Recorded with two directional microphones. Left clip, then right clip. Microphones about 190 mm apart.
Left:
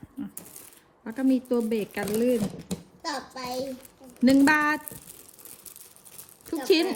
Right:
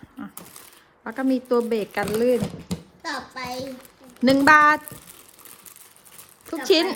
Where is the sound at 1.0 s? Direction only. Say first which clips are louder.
Right 3 dB; 50° left (ahead or behind).